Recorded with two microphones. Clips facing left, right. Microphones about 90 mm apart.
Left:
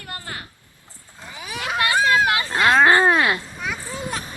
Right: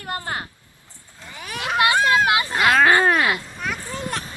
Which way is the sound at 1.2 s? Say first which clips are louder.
Left 1 dB; 15° left (ahead or behind).